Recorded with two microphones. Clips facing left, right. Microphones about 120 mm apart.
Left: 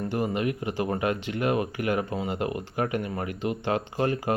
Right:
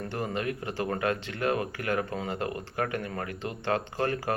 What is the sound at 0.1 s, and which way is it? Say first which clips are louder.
Speech: left 4 dB; 15° left (ahead or behind).